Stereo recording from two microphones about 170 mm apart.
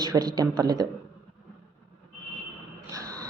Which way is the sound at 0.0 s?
25° right (ahead or behind).